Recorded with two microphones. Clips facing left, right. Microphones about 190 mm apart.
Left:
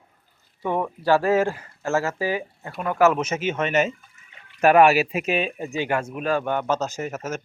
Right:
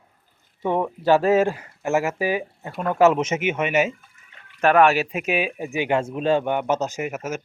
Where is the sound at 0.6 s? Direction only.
20° right (ahead or behind).